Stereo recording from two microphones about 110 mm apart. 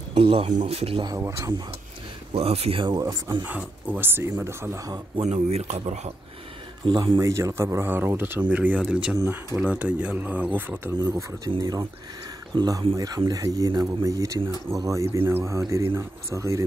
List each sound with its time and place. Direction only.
0.1 s speech: 55° right (ahead or behind)
1.0 s speech: 30° right (ahead or behind)
2.3 s speech: 65° right (ahead or behind)
2.8 s speech: 40° right (ahead or behind)
3.4 s speech: 15° right (ahead or behind); by 5.0 s 30° right (ahead or behind)
5.2 s speech: 75° right (ahead or behind)
6.9 s speech: 45° right (ahead or behind)
7.2 s speech: 30° right (ahead or behind)
11.0 s speech: 35° right (ahead or behind)